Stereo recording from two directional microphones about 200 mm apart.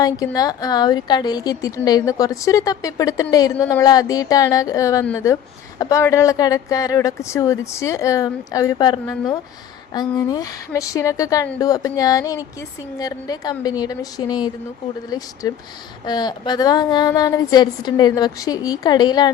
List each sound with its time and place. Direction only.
0.0 s a woman's voice: 20° left (ahead or behind)